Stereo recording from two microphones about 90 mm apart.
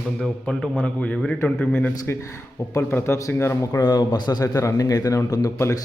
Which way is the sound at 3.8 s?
50° left (ahead or behind).